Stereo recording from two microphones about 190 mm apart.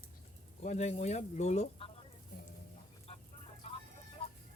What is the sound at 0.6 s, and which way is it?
Speech, 35° left (ahead or behind).